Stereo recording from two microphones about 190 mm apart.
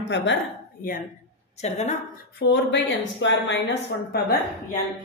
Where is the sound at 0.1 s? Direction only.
65° left (ahead or behind).